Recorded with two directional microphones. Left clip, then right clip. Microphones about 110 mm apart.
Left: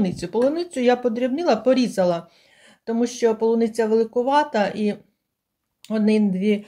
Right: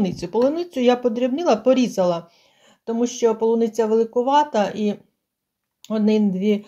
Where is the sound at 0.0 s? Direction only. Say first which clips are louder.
Right 1 dB; 25° right (ahead or behind).